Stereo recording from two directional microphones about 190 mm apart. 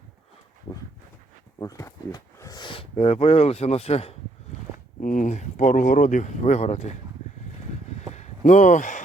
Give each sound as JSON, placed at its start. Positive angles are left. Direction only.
{"t": 1.5, "sound": "speech", "side_deg": 15}
{"t": 4.9, "sound": "speech", "side_deg": 45}
{"t": 8.1, "sound": "a sound", "side_deg": 40}